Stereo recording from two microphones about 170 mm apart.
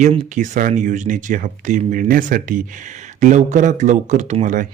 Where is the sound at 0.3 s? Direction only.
50° right (ahead or behind).